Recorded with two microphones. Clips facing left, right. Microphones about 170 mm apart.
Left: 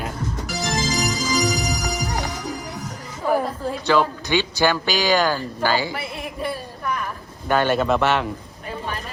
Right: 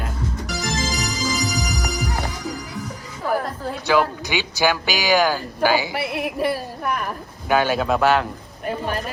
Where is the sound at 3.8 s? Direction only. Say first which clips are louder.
Even; 10° right (ahead or behind).